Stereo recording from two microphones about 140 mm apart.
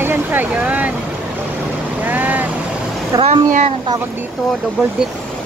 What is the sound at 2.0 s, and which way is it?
Boat, 10° right (ahead or behind).